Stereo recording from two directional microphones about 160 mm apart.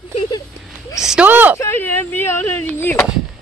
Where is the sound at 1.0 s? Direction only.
10° right (ahead or behind).